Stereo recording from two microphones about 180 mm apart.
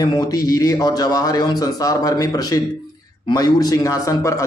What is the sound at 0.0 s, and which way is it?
A man's voice, 20° left (ahead or behind).